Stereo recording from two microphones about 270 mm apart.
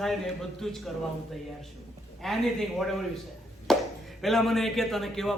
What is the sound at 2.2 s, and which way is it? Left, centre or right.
Speech, centre.